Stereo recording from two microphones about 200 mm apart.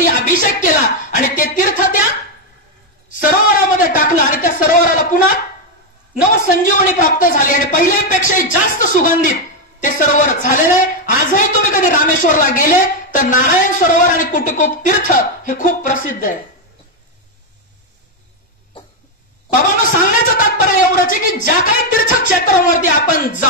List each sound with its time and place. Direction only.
0.0 s a woman's voice: 40° left (ahead or behind)
3.7 s a woman's voice: 40° left (ahead or behind)
6.4 s a woman's voice: 40° left (ahead or behind)
19.5 s a man's voice: 40° left (ahead or behind)